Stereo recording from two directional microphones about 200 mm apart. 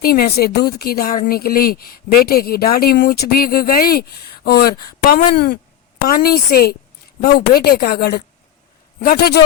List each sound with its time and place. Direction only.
0.0 s speech: 50° left (ahead or behind)